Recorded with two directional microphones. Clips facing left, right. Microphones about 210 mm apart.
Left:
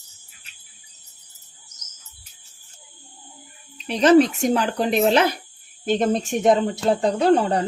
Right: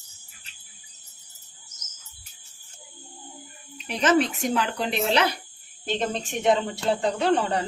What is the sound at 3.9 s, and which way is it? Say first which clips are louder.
A woman's voice: left 7 dB; 35° left (ahead or behind).